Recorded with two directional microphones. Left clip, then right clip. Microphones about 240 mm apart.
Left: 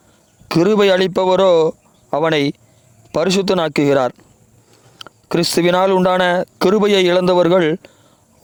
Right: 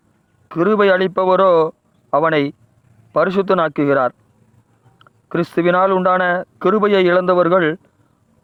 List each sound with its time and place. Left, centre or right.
0.4 s speech: left